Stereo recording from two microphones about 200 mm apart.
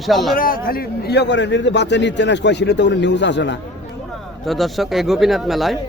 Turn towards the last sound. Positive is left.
turn(degrees=0)  # may be behind; listen again after turning